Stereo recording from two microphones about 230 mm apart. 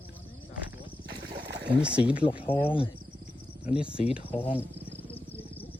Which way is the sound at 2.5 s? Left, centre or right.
Left.